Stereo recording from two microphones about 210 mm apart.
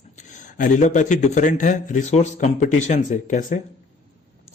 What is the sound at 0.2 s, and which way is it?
A man's voice, 35° left (ahead or behind).